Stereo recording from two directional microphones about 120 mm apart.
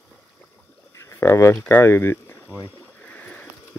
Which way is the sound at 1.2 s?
20° left (ahead or behind).